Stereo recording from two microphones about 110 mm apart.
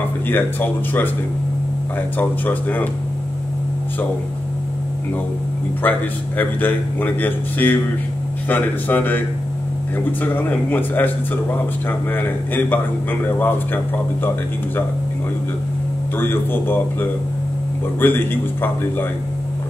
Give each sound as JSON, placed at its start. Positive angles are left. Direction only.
{"t": 0.3, "sound": "a man's voice", "side_deg": 20}
{"t": 2.1, "sound": "a man's voice", "side_deg": 15}
{"t": 5.8, "sound": "a man's voice", "side_deg": 15}
{"t": 10.2, "sound": "a man's voice", "side_deg": 15}
{"t": 12.1, "sound": "a man's voice", "side_deg": 15}
{"t": 16.2, "sound": "a man's voice", "side_deg": 20}